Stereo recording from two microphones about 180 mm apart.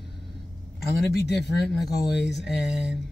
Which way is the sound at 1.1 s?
70° left (ahead or behind).